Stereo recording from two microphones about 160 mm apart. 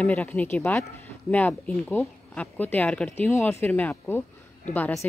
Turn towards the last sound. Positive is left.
turn(degrees=10)  # may be behind; listen again after turning